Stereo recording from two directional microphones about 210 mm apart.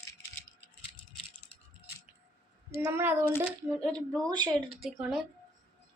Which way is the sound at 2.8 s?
10° right (ahead or behind).